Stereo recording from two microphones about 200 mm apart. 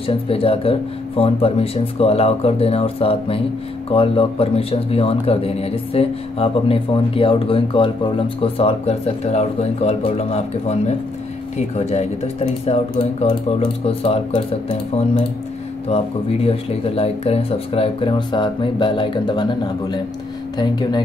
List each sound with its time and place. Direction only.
0.0 s speech: 30° left (ahead or behind)